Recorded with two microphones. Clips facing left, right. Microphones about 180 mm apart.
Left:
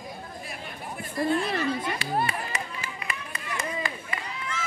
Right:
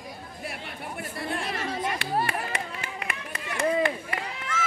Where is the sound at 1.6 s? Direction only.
80° right.